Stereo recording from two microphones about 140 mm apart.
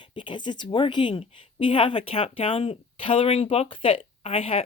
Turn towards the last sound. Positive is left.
turn(degrees=45)  # may be behind; listen again after turning